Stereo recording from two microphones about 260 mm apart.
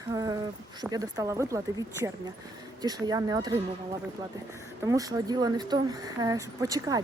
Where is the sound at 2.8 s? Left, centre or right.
Centre.